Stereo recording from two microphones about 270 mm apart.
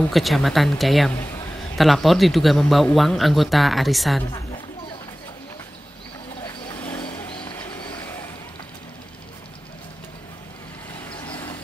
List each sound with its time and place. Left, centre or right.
0.1 s speech: centre
1.1 s a man's voice: centre
1.8 s speech: centre
6.4 s vehicle: centre
7.3 s a sound: centre
11.1 s vehicle: centre